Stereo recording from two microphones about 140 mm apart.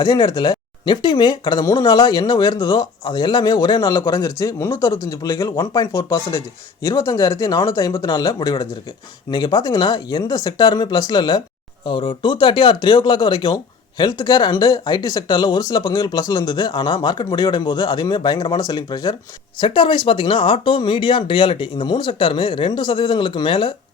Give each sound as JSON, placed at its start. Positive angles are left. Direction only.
{"t": 0.0, "sound": "speech", "side_deg": 30}